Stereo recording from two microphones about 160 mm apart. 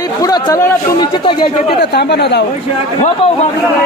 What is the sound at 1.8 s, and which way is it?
Speech, 90° left.